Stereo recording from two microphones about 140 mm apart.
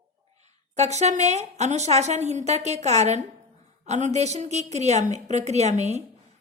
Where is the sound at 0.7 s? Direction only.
55° right (ahead or behind).